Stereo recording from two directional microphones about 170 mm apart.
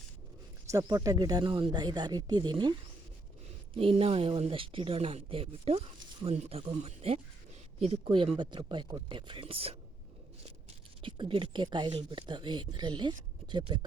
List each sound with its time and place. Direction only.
0.7 s speech: 20° right (ahead or behind)
3.8 s speech: 35° right (ahead or behind)